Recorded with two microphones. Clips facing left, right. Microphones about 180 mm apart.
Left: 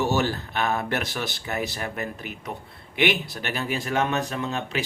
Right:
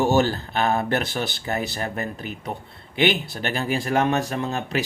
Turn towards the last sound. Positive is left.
turn(degrees=-40)  # may be behind; listen again after turning